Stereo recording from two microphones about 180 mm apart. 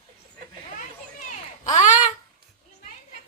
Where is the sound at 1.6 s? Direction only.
45° left (ahead or behind).